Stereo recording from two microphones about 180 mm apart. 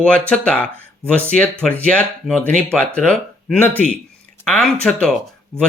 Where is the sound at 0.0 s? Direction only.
5° left (ahead or behind).